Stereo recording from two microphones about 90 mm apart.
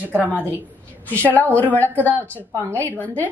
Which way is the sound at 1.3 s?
20° left (ahead or behind).